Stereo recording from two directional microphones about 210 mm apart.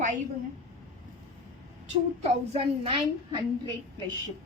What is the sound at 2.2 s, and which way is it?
A woman's voice, 30° right (ahead or behind).